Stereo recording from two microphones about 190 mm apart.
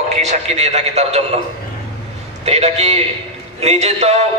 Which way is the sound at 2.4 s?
35° right (ahead or behind).